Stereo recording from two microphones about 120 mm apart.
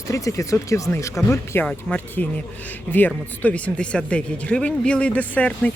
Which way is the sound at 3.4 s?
10° left (ahead or behind).